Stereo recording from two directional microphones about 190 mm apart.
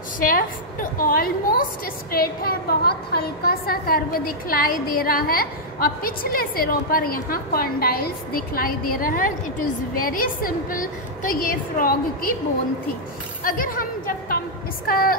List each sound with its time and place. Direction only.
0.2 s a woman's voice: 45° left (ahead or behind)
13.4 s a woman's voice: 45° left (ahead or behind)